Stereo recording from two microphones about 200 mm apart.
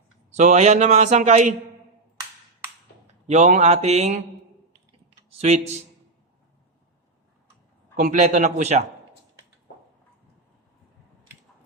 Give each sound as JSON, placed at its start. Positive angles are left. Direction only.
{"t": 0.3, "sound": "speech", "side_deg": -35}
{"t": 3.2, "sound": "speech", "side_deg": -35}
{"t": 5.4, "sound": "speech", "side_deg": -35}
{"t": 7.9, "sound": "speech", "side_deg": -40}